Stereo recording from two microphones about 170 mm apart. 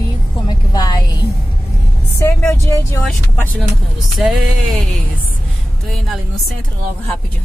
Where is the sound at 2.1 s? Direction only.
15° left (ahead or behind).